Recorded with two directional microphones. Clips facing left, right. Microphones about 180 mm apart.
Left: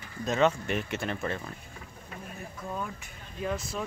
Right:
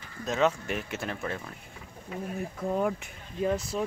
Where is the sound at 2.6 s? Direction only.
65° right (ahead or behind).